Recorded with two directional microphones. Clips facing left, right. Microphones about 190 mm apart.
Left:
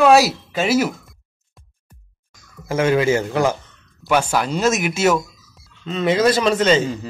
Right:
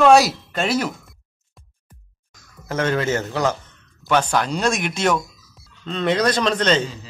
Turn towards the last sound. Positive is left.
turn(degrees=5)  # may be behind; listen again after turning